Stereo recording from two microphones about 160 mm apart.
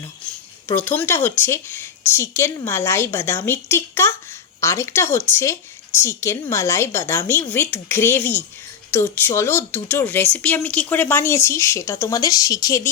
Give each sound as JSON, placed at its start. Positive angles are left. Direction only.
{"t": 0.9, "sound": "speech", "side_deg": 15}